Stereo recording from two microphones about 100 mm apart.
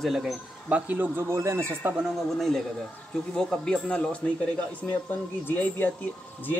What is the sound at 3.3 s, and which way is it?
A man's voice, 5° left (ahead or behind).